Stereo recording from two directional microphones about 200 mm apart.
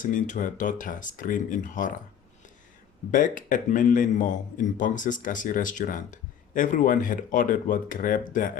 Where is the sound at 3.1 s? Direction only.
40° left (ahead or behind).